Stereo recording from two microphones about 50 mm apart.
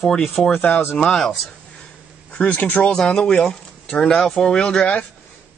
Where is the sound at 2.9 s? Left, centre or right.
Centre.